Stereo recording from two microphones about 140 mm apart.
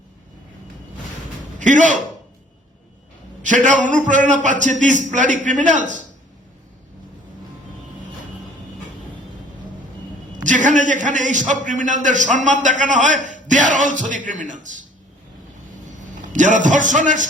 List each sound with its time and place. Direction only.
1.5 s speech: 60° right (ahead or behind)
3.4 s a man's voice: 65° right (ahead or behind)
10.3 s a man's voice: 65° right (ahead or behind)
16.0 s a man's voice: 60° right (ahead or behind)